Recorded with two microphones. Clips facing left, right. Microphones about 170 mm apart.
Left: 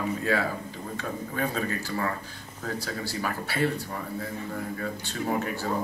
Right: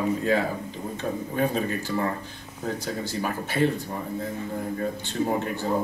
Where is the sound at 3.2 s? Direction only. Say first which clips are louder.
Right 4 dB; 20° right (ahead or behind).